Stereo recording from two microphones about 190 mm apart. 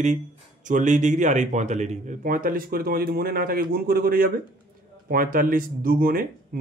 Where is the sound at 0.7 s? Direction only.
40° right (ahead or behind).